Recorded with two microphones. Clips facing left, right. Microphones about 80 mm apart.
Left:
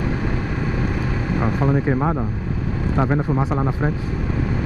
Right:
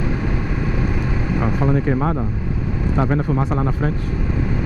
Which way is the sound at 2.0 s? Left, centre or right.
Centre.